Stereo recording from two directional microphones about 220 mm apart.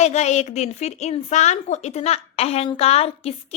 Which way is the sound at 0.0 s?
30° left (ahead or behind).